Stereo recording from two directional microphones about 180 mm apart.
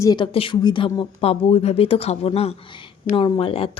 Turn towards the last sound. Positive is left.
turn(degrees=30)  # may be behind; listen again after turning